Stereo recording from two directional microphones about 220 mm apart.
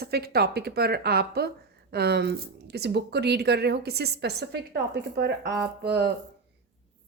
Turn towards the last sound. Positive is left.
turn(degrees=-50)  # may be behind; listen again after turning